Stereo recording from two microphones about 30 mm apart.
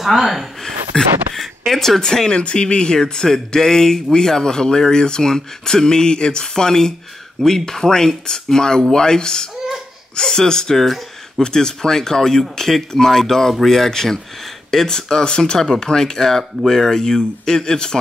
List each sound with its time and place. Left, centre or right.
0.0 s speech: centre
0.9 s speech: left
1.3 s speech: centre
2.2 s speech: left
10.8 s a sound: centre
11.4 s speech: left
15.2 s speech: left
15.6 s speech: centre